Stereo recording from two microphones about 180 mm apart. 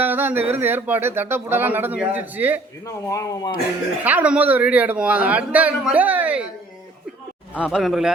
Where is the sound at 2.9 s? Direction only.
20° left (ahead or behind).